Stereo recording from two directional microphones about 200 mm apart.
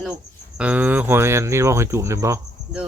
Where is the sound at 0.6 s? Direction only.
5° right (ahead or behind).